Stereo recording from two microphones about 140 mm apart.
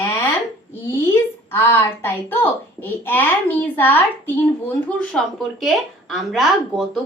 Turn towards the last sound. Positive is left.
turn(degrees=0)  # may be behind; listen again after turning